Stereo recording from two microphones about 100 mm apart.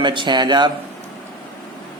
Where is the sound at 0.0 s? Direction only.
50° right (ahead or behind).